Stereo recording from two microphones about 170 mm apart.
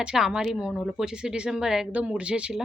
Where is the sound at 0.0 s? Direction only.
5° right (ahead or behind).